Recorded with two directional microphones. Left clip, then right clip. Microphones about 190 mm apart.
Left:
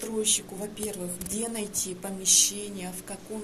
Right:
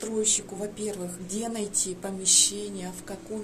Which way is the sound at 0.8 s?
10° right (ahead or behind).